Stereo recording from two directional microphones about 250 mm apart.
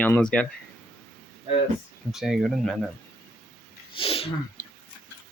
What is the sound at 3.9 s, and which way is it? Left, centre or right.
Speech, left.